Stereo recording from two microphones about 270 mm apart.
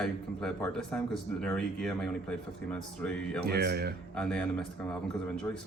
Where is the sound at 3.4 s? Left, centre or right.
Right.